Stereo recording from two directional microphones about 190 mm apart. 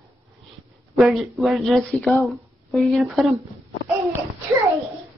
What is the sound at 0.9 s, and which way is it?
Speech, centre (ahead or behind).